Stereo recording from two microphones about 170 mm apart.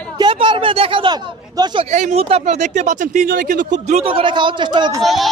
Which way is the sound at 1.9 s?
40° right (ahead or behind).